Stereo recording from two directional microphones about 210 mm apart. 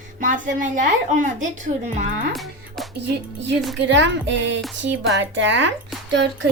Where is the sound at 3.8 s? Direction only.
60° right (ahead or behind).